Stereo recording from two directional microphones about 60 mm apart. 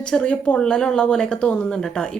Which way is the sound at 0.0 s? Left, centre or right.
Centre.